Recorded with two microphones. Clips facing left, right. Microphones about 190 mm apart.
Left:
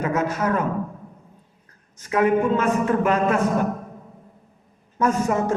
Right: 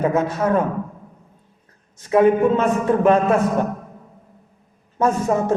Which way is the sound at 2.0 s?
25° right (ahead or behind).